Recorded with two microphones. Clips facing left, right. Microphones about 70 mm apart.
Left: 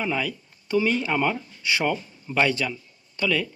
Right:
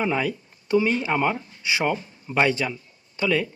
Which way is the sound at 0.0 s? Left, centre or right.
Right.